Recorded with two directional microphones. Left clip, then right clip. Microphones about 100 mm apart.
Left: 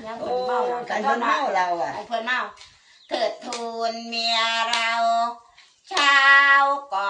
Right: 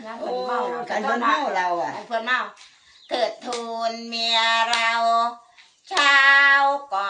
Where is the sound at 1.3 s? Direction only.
25° left (ahead or behind).